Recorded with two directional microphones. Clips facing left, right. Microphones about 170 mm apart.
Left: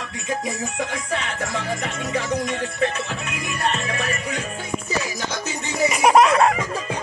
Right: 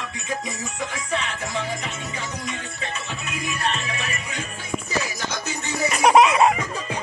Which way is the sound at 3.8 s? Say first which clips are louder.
Left 5 dB; 45° left (ahead or behind).